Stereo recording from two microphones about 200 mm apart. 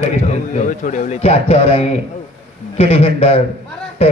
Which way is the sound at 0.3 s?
40° left (ahead or behind).